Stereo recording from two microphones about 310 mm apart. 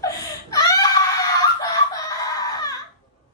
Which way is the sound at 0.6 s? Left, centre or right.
Centre.